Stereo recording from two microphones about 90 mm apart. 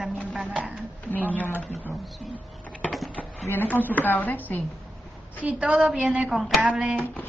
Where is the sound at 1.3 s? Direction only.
20° left (ahead or behind).